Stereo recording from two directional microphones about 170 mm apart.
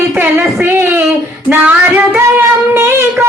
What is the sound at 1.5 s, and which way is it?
Music, 10° right (ahead or behind).